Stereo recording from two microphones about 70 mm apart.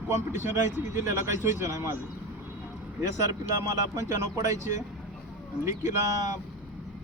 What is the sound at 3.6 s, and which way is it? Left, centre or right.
Speech, right.